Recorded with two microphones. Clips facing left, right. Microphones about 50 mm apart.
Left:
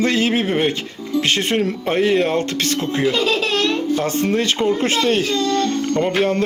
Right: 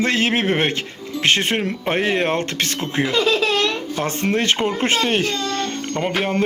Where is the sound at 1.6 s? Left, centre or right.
Right.